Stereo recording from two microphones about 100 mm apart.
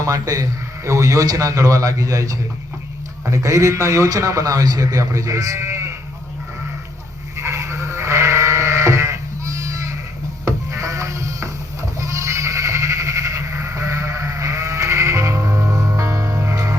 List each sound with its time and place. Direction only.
0.0 s a man's voice: 35° right (ahead or behind)
7.3 s sheep: 30° right (ahead or behind)